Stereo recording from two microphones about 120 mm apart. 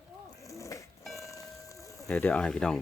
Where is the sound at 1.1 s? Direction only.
25° left (ahead or behind).